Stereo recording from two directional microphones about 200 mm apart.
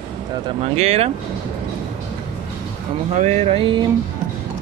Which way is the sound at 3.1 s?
35° right (ahead or behind).